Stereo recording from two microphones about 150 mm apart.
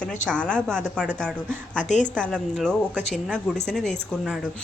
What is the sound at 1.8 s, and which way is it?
Speech, 55° left (ahead or behind).